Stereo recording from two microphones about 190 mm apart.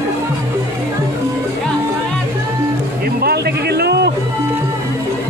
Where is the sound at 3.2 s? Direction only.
55° right (ahead or behind).